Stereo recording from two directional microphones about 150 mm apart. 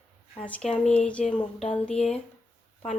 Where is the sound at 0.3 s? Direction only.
10° left (ahead or behind).